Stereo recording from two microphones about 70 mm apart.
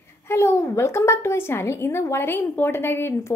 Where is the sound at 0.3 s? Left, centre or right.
Left.